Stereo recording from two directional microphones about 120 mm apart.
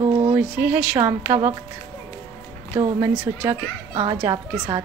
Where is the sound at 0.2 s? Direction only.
15° right (ahead or behind).